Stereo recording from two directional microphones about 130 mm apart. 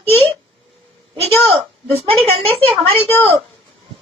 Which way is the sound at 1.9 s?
50° right (ahead or behind).